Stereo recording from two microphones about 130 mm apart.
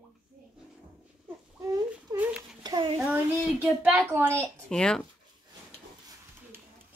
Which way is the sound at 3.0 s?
15° right (ahead or behind).